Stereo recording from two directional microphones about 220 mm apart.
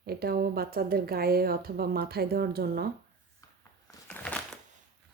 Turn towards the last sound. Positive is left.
turn(degrees=5)  # may be behind; listen again after turning